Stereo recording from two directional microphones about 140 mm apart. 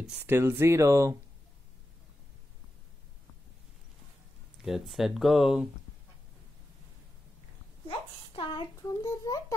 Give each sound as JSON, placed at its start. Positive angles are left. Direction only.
{"t": 0.3, "sound": "speech", "side_deg": -15}
{"t": 4.6, "sound": "speech", "side_deg": 0}
{"t": 8.3, "sound": "speech", "side_deg": 35}
{"t": 9.0, "sound": "a child's voice", "side_deg": 25}